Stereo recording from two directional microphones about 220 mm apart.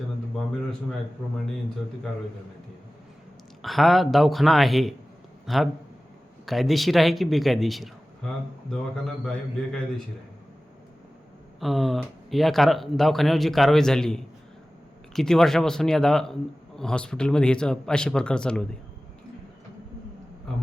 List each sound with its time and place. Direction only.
3.6 s a man's voice: centre (ahead or behind)
11.6 s a man's voice: centre (ahead or behind)